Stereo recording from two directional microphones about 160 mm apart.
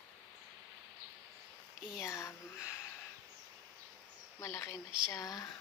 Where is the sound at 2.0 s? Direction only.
15° left (ahead or behind).